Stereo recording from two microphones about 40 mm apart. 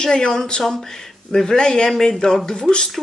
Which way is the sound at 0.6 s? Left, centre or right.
Centre.